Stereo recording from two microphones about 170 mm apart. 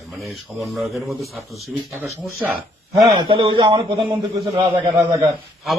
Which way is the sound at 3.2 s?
25° right (ahead or behind).